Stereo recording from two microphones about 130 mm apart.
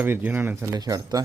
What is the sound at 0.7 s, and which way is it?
Speech, 30° right (ahead or behind).